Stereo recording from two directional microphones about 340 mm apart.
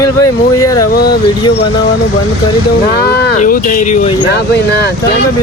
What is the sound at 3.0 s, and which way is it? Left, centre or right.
Speech, left.